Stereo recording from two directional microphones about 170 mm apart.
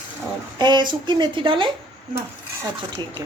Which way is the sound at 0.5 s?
25° right (ahead or behind).